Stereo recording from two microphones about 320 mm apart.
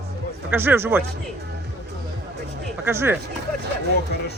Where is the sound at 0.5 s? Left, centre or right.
Centre.